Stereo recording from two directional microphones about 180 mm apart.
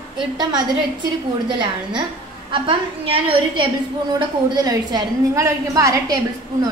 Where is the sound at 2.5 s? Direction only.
30° right (ahead or behind).